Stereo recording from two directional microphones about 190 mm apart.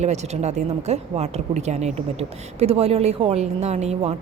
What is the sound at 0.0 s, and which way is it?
Speech, 35° right (ahead or behind).